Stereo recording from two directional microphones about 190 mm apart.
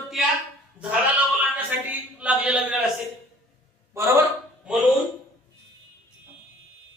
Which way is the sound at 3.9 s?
15° right (ahead or behind).